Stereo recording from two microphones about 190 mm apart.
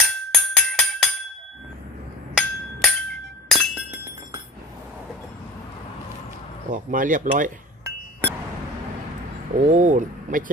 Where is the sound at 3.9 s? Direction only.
15° right (ahead or behind).